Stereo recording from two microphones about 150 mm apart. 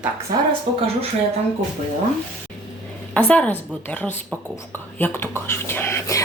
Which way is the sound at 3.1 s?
10° left (ahead or behind).